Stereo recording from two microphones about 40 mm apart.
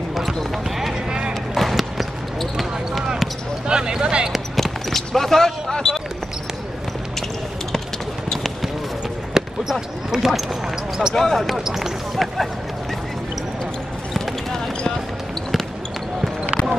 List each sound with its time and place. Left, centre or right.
0.1 s basketball bounce: centre
3.6 s a sound: centre
4.6 s basketball bounce: centre
9.3 s basketball bounce: centre
11.1 s speech: centre
11.5 s speech: centre